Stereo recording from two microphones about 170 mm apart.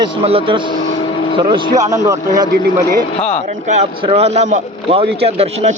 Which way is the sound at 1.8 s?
20° right (ahead or behind).